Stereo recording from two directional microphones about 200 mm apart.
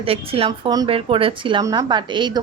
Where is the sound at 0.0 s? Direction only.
30° right (ahead or behind).